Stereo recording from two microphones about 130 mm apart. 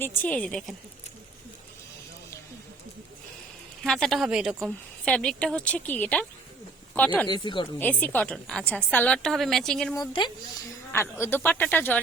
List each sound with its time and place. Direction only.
0.0 s a woman's voice: 15° left (ahead or behind)
3.8 s speech: centre (ahead or behind)
5.0 s a woman's voice: 5° left (ahead or behind)
7.3 s speech: 35° left (ahead or behind)
7.8 s a woman's voice: 15° left (ahead or behind)
10.1 s speech: 35° left (ahead or behind)
10.9 s a woman's voice: 20° left (ahead or behind)